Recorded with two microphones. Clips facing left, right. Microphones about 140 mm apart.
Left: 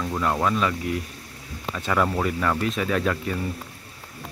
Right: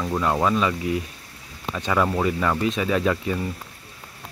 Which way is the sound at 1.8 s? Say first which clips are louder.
Right 1 dB; centre (ahead or behind).